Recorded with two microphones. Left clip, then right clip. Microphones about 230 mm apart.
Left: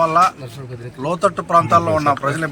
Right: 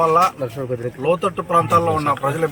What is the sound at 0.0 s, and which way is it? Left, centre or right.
A man's voice, centre.